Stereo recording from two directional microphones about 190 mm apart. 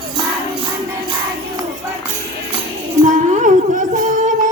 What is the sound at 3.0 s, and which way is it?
Music, 40° right (ahead or behind).